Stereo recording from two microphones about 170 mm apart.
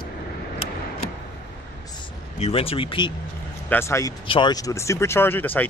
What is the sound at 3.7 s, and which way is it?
Speech, 15° left (ahead or behind).